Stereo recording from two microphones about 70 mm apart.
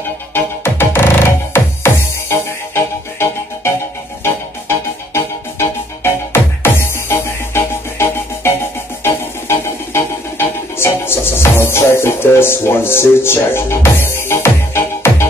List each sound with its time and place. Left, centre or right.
0.3 s music: left